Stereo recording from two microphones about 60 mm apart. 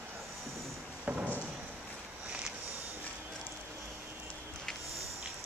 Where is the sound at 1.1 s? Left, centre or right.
Right.